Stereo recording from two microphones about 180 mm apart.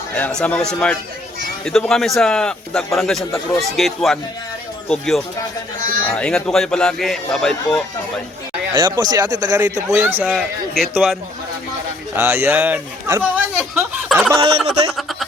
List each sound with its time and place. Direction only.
0.2 s speech: 5° left (ahead or behind)
8.7 s speech: 20° right (ahead or behind)
10.3 s speech: centre (ahead or behind)
12.1 s speech: 15° right (ahead or behind)